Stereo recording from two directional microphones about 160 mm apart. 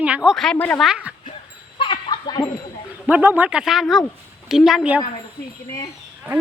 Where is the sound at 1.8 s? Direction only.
30° left (ahead or behind).